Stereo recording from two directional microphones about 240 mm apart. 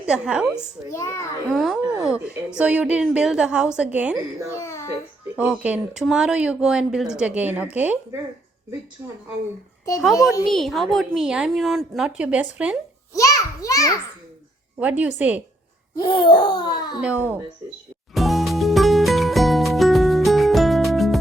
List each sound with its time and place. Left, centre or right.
0.0 s speech: centre
0.9 s speech: centre
1.5 s speech: centre
4.4 s speech: centre
5.4 s speech: centre
10.4 s speech: centre
13.1 s a sound: centre
14.8 s speech: centre
16.0 s speech: centre
17.0 s speech: centre
18.1 s music: centre